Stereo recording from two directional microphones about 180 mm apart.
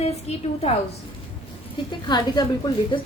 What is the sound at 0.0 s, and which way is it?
Speech, 35° left (ahead or behind).